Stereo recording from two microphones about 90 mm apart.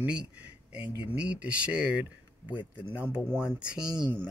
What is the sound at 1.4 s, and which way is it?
Speech, 15° right (ahead or behind).